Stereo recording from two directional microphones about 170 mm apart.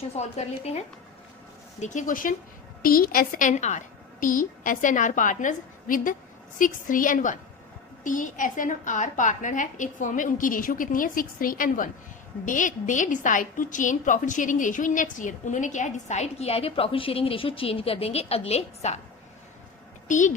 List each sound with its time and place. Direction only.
0.1 s a woman's voice: 40° left (ahead or behind)
20.1 s a woman's voice: 50° left (ahead or behind)